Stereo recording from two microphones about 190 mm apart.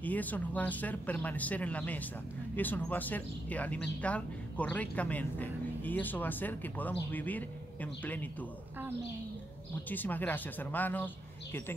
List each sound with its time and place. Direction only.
0.0 s speech: 10° left (ahead or behind)
9.8 s speech: 10° left (ahead or behind)